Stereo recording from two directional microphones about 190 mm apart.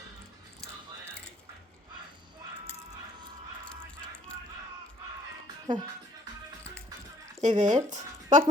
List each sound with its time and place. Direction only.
5.6 s speech: 25° right (ahead or behind)
7.4 s speech: 40° right (ahead or behind)